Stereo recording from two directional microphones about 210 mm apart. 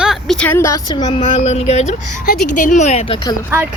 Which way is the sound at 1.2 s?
30° left (ahead or behind).